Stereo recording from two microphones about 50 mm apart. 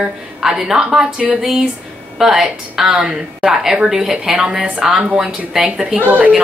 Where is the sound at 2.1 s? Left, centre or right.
Centre.